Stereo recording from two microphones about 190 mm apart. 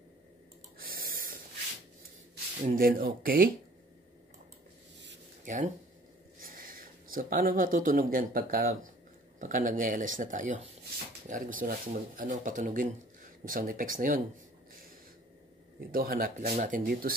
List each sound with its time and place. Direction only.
0.7 s gasp: 50° right (ahead or behind)
2.6 s speech: 50° right (ahead or behind)
5.4 s speech: 40° right (ahead or behind)
15.9 s speech: 50° right (ahead or behind)